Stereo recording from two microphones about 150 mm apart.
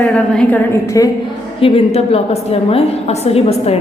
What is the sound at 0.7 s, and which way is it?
Speech, 20° left (ahead or behind).